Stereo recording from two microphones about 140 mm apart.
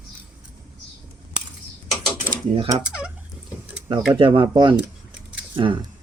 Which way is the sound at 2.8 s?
10° right (ahead or behind).